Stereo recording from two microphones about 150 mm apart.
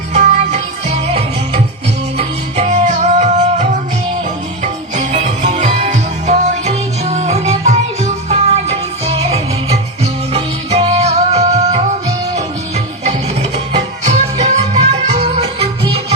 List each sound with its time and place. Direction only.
0.1 s music: 50° right (ahead or behind)
14.0 s music: 45° right (ahead or behind)